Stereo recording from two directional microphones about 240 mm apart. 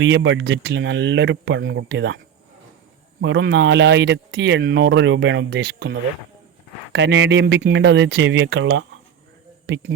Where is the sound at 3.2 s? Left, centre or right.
Right.